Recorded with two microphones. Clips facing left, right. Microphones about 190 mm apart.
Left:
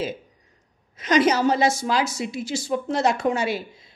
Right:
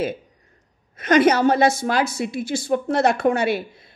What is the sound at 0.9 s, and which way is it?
A woman's voice, 55° right (ahead or behind).